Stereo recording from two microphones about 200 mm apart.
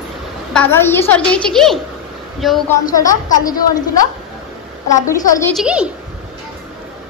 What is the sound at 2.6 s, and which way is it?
Speech, 15° left (ahead or behind).